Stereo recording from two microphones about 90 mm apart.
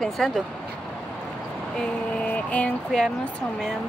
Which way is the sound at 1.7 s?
15° left (ahead or behind).